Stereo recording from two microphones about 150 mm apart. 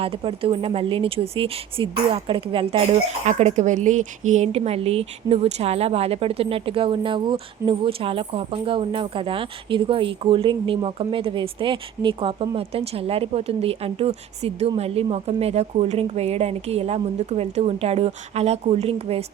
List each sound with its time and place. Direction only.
0.0 s speech: 40° right (ahead or behind)